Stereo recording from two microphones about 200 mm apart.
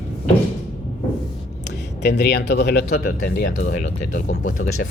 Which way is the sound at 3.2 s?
40° left (ahead or behind).